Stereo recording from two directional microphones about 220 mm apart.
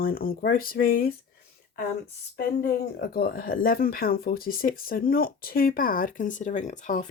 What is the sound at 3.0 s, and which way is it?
Speech, 45° left (ahead or behind).